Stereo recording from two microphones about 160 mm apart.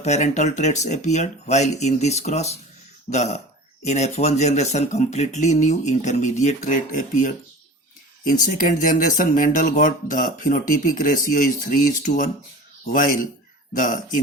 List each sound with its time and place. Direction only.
0.0 s speech: 45° left (ahead or behind)